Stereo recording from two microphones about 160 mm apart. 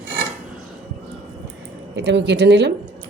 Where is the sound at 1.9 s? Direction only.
90° right.